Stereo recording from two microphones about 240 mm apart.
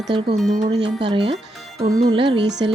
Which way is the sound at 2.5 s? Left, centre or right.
Right.